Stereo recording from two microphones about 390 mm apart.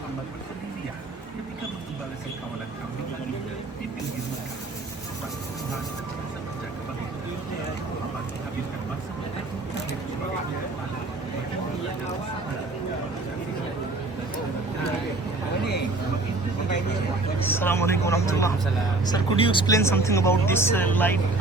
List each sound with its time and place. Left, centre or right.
17.6 s vehicle: centre
19.0 s speech: centre